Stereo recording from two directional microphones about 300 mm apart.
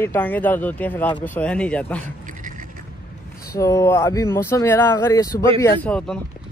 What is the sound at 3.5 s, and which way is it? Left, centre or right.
Speech, centre.